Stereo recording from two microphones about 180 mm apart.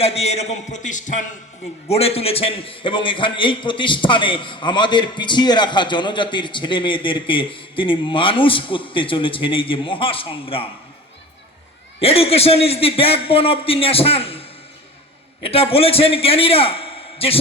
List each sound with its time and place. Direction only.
0.0 s a man's voice: 35° left (ahead or behind)
1.9 s a man's voice: 35° left (ahead or behind)
11.9 s a man's voice: 35° left (ahead or behind)
15.4 s a man's voice: 30° left (ahead or behind)